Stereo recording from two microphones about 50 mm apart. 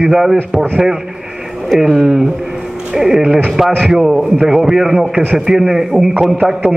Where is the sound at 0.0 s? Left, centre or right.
Centre.